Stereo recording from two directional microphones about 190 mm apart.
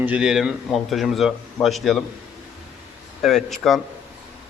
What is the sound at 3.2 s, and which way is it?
Speech, centre (ahead or behind).